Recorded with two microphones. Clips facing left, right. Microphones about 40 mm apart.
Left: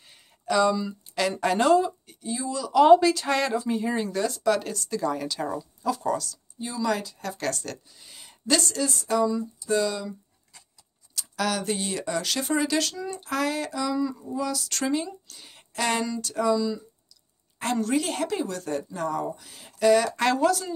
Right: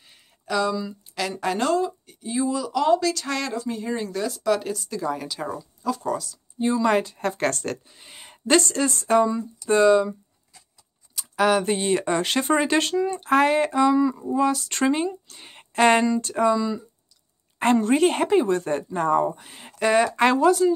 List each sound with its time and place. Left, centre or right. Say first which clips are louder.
0.5 s speech: left 2 dB; centre
2.8 s speech: left 6 dB; centre
6.6 s speech: right 7 dB; right
11.1 s speech: right 7 dB; right
16.5 s a woman's voice: right 1 dB; right